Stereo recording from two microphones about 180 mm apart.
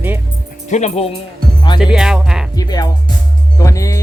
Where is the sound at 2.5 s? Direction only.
20° left (ahead or behind).